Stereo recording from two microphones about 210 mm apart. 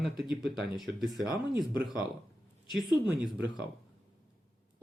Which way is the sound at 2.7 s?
Centre (ahead or behind).